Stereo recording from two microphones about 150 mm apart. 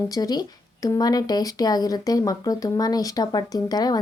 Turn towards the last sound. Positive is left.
turn(degrees=25)  # may be behind; listen again after turning